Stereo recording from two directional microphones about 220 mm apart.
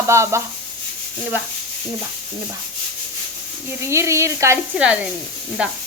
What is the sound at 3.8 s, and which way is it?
Speech, 15° right (ahead or behind).